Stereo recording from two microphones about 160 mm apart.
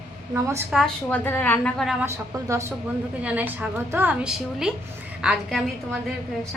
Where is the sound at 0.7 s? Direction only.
Centre (ahead or behind).